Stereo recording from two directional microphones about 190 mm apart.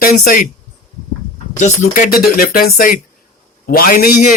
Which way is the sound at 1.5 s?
40° left (ahead or behind).